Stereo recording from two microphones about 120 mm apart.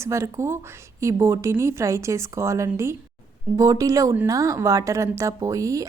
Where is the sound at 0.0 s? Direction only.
25° right (ahead or behind).